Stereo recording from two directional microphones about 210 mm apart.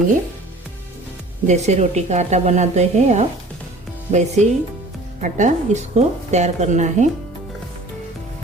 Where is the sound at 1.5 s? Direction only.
30° right (ahead or behind).